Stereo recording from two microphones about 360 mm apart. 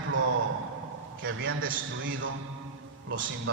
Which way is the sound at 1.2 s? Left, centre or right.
Right.